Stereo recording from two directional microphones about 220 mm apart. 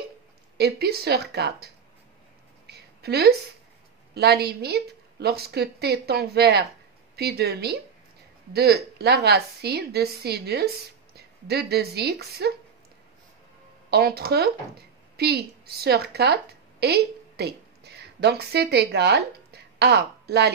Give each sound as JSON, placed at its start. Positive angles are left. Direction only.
{"t": 0.6, "sound": "speech", "side_deg": -45}
{"t": 2.6, "sound": "a sound", "side_deg": -45}
{"t": 4.1, "sound": "speech", "side_deg": -50}
{"t": 13.8, "sound": "a woman's voice", "side_deg": -45}